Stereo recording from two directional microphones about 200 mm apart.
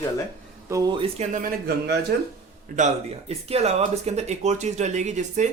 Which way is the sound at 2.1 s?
55° right (ahead or behind).